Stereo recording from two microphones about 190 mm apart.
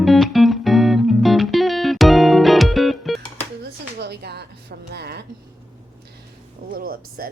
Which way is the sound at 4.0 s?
60° right (ahead or behind).